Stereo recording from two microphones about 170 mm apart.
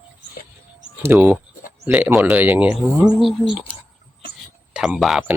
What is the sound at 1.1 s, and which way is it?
Speech, 10° right (ahead or behind).